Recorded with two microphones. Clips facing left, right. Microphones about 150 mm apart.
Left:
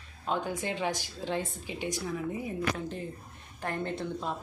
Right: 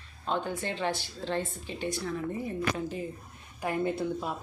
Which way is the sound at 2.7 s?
5° right (ahead or behind).